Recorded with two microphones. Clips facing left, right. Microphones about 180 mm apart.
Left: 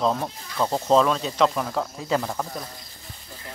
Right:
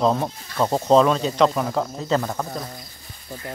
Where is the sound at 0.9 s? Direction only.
Centre (ahead or behind).